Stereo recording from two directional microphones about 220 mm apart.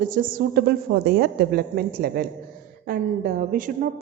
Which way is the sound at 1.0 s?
50° right (ahead or behind).